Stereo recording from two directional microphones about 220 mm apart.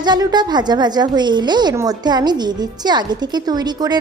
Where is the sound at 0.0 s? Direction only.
20° right (ahead or behind).